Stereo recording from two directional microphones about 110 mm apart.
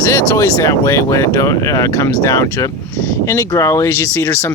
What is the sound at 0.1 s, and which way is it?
Speech, 25° left (ahead or behind).